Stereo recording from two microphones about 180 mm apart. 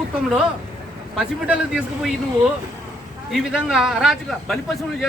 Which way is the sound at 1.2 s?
5° right (ahead or behind).